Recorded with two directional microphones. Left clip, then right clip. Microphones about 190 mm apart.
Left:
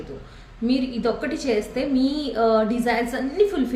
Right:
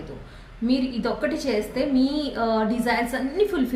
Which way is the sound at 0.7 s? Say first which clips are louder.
Left 2 dB; 10° left (ahead or behind).